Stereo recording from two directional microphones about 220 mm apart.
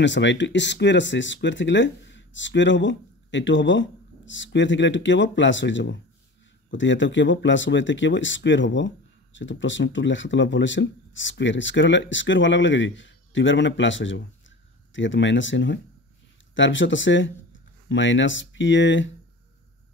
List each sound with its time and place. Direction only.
0.0 s speech: 55° left (ahead or behind)